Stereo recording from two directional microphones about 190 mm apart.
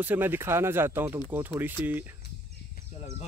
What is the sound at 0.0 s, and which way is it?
Speech, 10° right (ahead or behind).